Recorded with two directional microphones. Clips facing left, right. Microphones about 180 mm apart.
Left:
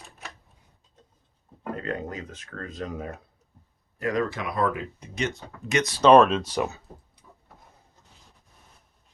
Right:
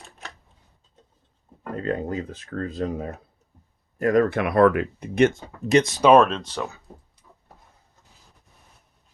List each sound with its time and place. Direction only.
1.7 s speech: 30° right (ahead or behind)
3.9 s speech: 45° right (ahead or behind)
5.6 s speech: 30° right (ahead or behind)
6.0 s speech: 5° right (ahead or behind)